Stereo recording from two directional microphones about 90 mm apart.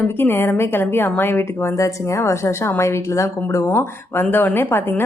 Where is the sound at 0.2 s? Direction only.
25° left (ahead or behind).